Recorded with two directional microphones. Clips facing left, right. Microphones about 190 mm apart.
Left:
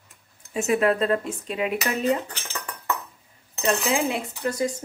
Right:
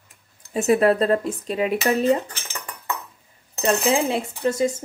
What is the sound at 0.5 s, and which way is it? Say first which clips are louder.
Speech: right 4 dB; 35° right (ahead or behind).